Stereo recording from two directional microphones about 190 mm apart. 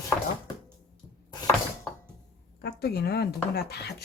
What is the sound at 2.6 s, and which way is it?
Speech, 55° left (ahead or behind).